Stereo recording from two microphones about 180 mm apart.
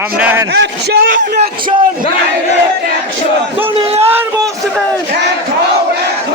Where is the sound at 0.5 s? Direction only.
65° right (ahead or behind).